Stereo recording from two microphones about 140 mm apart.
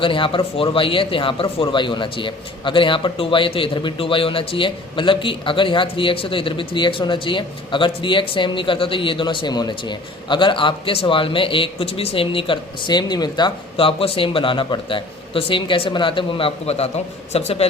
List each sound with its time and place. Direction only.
0.0 s a man's voice: 40° left (ahead or behind)